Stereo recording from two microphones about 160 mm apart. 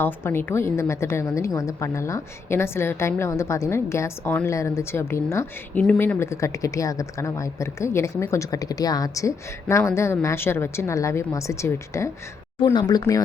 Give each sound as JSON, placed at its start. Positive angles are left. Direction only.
{"t": 0.0, "sound": "speech", "side_deg": 15}